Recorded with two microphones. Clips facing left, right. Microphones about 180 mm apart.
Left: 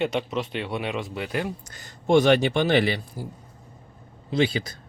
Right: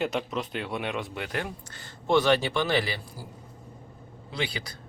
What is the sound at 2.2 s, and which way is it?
Speech, 20° left (ahead or behind).